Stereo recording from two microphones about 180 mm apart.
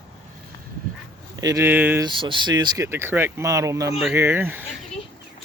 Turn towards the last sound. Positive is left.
turn(degrees=-10)  # may be behind; listen again after turning